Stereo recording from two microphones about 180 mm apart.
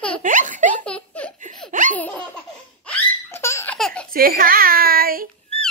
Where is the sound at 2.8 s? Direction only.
10° left (ahead or behind).